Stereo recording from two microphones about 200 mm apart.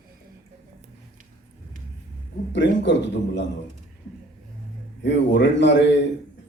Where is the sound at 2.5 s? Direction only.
65° left (ahead or behind).